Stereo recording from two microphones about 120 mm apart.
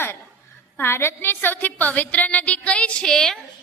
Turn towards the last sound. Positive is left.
turn(degrees=5)  # may be behind; listen again after turning